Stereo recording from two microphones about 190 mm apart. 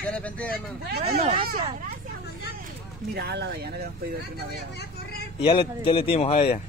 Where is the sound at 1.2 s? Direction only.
35° right (ahead or behind).